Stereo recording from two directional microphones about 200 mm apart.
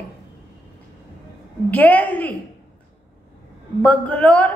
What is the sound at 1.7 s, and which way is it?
Speech, 10° left (ahead or behind).